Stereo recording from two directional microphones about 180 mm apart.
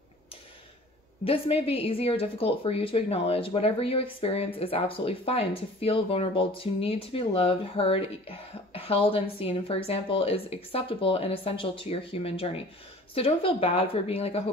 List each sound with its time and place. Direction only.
1.2 s speech: 30° left (ahead or behind)